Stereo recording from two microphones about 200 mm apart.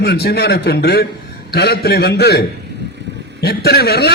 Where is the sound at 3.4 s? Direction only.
50° left (ahead or behind).